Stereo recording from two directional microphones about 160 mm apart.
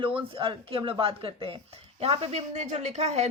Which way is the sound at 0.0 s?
35° right (ahead or behind).